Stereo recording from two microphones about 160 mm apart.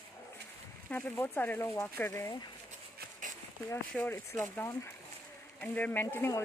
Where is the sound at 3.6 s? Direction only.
10° left (ahead or behind).